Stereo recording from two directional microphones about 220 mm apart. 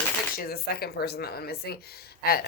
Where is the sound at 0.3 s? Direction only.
45° left (ahead or behind).